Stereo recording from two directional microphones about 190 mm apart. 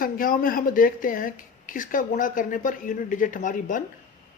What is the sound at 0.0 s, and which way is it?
Speech, 45° left (ahead or behind).